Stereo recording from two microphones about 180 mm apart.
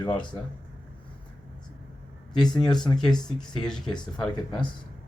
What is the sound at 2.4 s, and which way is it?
Speech, 5° left (ahead or behind).